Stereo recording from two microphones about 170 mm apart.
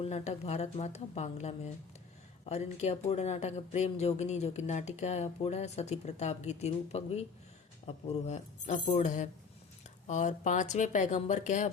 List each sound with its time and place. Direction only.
0.0 s speech: 40° left (ahead or behind)